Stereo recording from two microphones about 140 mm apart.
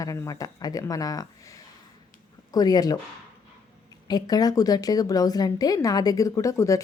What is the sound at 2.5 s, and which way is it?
Speech, 30° left (ahead or behind).